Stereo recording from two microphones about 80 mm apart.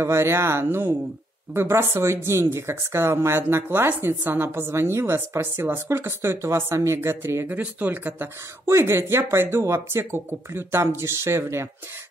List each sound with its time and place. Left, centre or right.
0.0 s speech: right